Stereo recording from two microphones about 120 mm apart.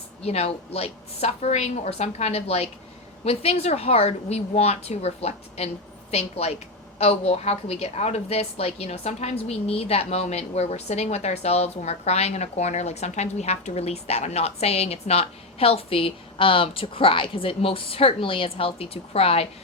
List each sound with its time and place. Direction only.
0.2 s a woman's voice: 60° left (ahead or behind)